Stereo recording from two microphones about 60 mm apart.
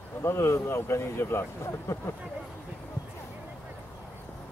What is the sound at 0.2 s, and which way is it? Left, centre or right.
Speech, left.